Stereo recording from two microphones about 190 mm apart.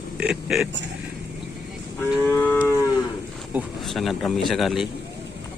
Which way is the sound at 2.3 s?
15° left (ahead or behind).